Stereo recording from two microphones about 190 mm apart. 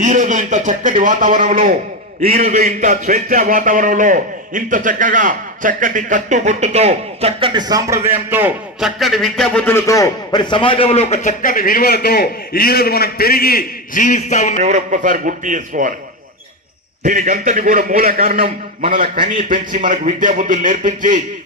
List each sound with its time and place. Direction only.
0.0 s a man's voice: 40° right (ahead or behind); by 14.6 s 40° left (ahead or behind)
14.6 s a man's voice: 40° right (ahead or behind)
17.1 s a man's voice: 40° right (ahead or behind)